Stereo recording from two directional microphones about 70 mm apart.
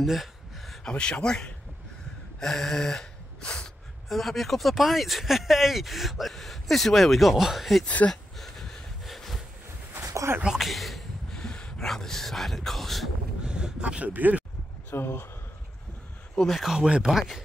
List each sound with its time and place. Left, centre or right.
0.0 s a sound: centre
0.8 s speech: centre
7.8 s speech: left
8.1 s a sound: centre
10.0 s dog: right
10.4 s speech: centre
13.4 s a sound: centre
14.9 s speech: left
16.3 s speech: centre